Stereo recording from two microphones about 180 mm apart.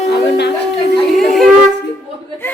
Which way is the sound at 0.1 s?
70° left (ahead or behind).